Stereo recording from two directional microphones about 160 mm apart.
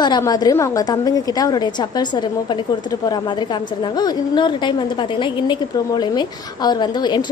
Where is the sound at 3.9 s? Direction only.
25° left (ahead or behind).